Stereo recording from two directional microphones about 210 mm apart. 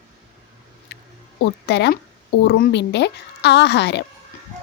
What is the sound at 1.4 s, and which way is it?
Speech, 50° left (ahead or behind).